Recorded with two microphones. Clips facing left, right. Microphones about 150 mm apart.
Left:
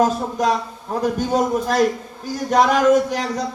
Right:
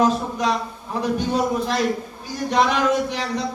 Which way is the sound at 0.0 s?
45° left (ahead or behind).